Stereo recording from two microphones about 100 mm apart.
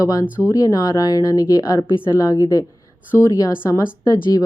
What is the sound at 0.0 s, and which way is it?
Speech, 35° left (ahead or behind).